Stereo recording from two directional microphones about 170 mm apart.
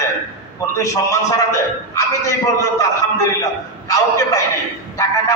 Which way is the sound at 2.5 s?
20° left (ahead or behind).